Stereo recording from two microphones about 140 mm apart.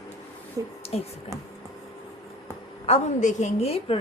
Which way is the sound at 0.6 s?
25° right (ahead or behind).